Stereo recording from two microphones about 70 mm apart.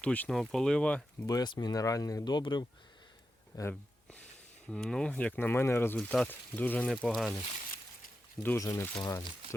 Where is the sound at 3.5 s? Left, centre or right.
Left.